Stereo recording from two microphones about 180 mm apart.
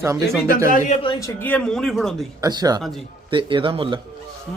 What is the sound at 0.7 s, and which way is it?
Speech, 45° left (ahead or behind).